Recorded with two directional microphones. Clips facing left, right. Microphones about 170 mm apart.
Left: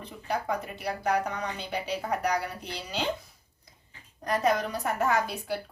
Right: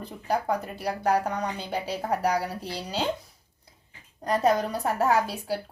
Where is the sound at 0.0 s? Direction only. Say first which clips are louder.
Right 4 dB; 35° right (ahead or behind).